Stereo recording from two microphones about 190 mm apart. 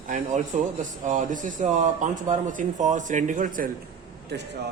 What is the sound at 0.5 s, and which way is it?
Speech, 40° right (ahead or behind).